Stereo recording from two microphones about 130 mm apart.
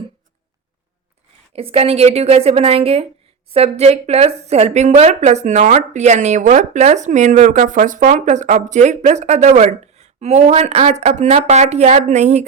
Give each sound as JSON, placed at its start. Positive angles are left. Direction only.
{"t": 1.5, "sound": "a woman's voice", "side_deg": -50}